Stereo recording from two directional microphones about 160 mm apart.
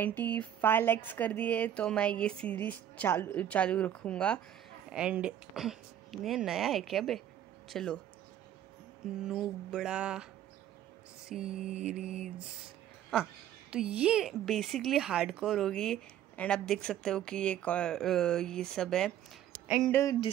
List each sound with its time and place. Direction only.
0.0 s speech: 10° left (ahead or behind)
4.8 s a woman's voice: 5° right (ahead or behind)
9.2 s a woman's voice: 5° right (ahead or behind)
11.2 s a woman's voice: 5° right (ahead or behind)
19.9 s speech: 15° left (ahead or behind)